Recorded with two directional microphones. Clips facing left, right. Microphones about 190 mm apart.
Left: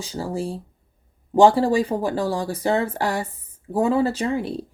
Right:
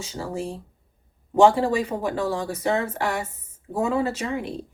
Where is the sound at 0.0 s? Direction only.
35° left (ahead or behind).